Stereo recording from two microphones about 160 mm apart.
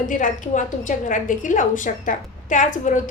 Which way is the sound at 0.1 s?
55° left (ahead or behind).